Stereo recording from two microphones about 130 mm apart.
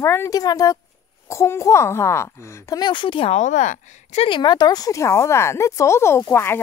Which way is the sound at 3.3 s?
65° left (ahead or behind).